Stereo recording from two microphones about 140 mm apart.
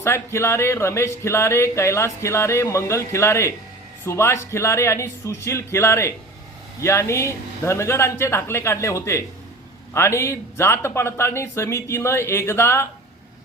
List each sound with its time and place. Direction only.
0.0 s speech: 20° left (ahead or behind)